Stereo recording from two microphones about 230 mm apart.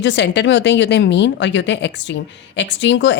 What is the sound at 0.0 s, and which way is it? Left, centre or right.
A woman's voice, left.